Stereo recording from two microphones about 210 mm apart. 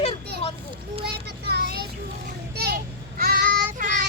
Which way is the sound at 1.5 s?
50° right (ahead or behind).